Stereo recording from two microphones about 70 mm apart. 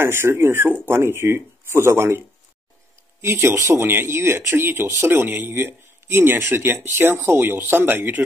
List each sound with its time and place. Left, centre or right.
0.0 s speech: right